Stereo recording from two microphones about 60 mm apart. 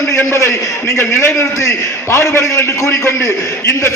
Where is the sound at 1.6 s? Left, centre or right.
Left.